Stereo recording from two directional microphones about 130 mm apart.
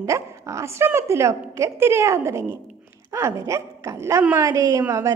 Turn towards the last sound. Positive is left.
turn(degrees=-25)  # may be behind; listen again after turning